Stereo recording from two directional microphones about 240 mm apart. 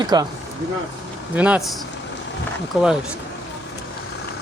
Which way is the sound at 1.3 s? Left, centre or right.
Centre.